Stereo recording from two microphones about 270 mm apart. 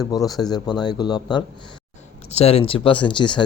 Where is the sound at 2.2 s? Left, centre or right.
Left.